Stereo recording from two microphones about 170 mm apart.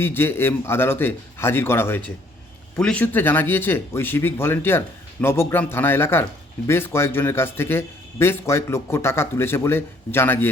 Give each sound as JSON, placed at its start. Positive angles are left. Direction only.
{"t": 0.0, "sound": "a man's voice", "side_deg": 15}